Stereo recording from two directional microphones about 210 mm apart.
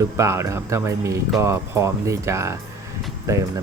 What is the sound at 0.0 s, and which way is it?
Speech, 15° right (ahead or behind).